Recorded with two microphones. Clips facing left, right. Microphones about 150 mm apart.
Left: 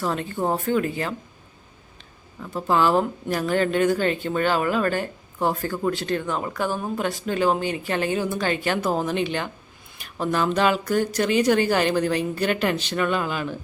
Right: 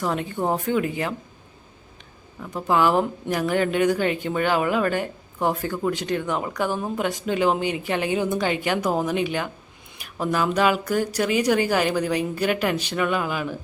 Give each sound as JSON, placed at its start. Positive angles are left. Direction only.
{"t": 0.0, "sound": "a woman's voice", "side_deg": -15}
{"t": 2.6, "sound": "a woman's voice", "side_deg": -15}